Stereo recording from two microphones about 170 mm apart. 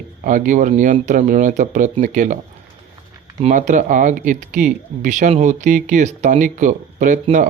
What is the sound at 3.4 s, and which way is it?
Speech, 45° right (ahead or behind).